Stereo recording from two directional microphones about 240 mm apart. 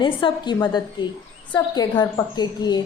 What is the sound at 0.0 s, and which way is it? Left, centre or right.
A woman's voice, centre.